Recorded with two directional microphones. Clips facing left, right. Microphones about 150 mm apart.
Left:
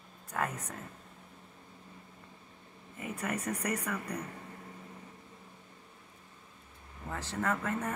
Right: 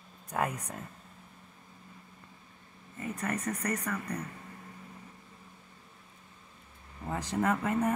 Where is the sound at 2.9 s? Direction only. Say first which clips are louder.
Right 2 dB; 10° left (ahead or behind).